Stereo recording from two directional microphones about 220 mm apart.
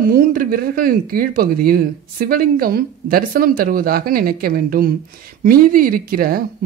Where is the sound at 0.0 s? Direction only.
40° right (ahead or behind).